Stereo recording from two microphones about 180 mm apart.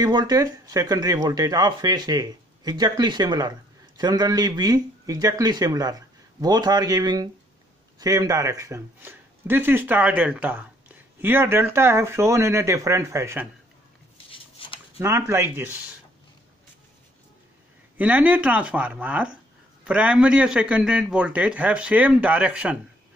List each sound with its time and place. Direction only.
0.0 s a man's voice: 20° right (ahead or behind)
14.6 s a sound: 30° left (ahead or behind)
15.0 s a man's voice: 15° right (ahead or behind)
17.9 s a man's voice: 10° right (ahead or behind)